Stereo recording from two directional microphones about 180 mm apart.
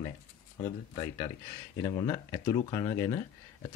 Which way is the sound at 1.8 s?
20° left (ahead or behind).